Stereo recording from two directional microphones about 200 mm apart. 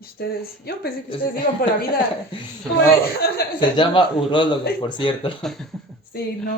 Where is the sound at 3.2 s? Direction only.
50° left (ahead or behind).